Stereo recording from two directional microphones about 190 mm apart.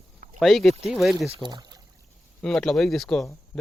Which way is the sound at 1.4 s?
20° right (ahead or behind).